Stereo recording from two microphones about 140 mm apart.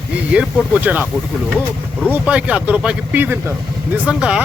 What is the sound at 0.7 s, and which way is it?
Speech, 10° right (ahead or behind).